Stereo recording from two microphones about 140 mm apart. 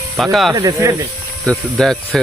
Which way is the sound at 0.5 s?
25° right (ahead or behind).